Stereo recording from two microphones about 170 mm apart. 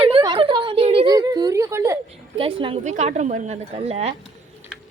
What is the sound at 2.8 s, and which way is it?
A woman's voice, 45° right (ahead or behind).